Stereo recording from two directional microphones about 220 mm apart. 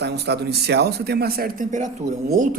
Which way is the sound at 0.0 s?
50° right (ahead or behind).